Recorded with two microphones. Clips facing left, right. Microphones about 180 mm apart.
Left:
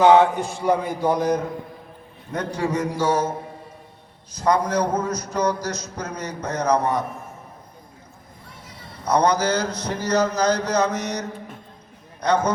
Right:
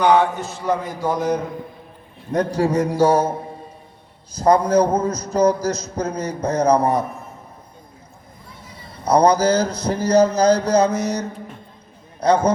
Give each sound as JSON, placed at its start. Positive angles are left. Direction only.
{"t": 0.0, "sound": "a sound", "side_deg": 20}
{"t": 2.3, "sound": "a man's voice", "side_deg": -35}
{"t": 4.4, "sound": "a man's voice", "side_deg": -30}
{"t": 9.0, "sound": "a man's voice", "side_deg": -30}